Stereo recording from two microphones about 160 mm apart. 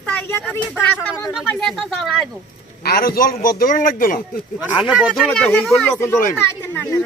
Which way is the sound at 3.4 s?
60° left (ahead or behind).